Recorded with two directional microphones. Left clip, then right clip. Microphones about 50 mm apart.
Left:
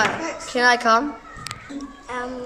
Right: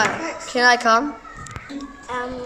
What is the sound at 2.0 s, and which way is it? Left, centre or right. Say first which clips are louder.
Music: right 2 dB; centre.